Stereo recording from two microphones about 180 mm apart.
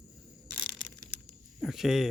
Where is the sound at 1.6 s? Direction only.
Centre (ahead or behind).